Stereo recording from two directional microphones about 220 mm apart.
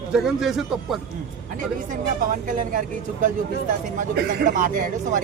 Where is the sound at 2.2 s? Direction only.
35° right (ahead or behind).